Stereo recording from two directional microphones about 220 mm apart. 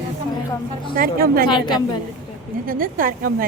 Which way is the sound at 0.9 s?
40° right (ahead or behind).